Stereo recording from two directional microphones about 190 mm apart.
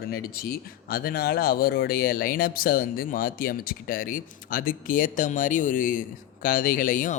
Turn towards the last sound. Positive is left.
turn(degrees=45)  # may be behind; listen again after turning